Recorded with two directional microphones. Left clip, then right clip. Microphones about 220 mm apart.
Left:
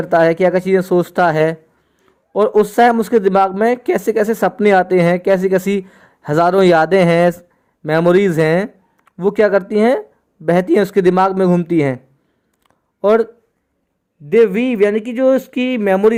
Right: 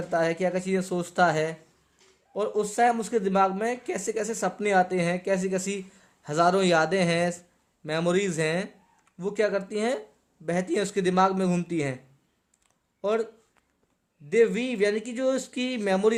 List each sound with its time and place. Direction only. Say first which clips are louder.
0.1 s speech: left 14 dB; 35° left (ahead or behind)
12.6 s a sound: left 15 dB; 35° left (ahead or behind)
14.3 s speech: left 10 dB; 25° left (ahead or behind)